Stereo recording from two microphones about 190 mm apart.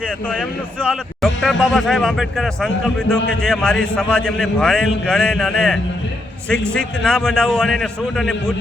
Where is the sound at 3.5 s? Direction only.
Centre (ahead or behind).